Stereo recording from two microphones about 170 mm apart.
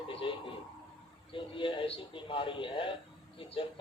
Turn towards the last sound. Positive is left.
turn(degrees=30)  # may be behind; listen again after turning